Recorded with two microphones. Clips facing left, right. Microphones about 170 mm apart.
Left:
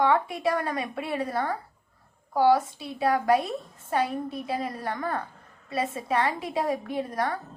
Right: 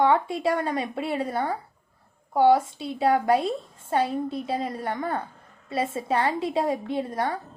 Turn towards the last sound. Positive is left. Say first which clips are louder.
# right 2 dB
turn(degrees=-25)  # may be behind; listen again after turning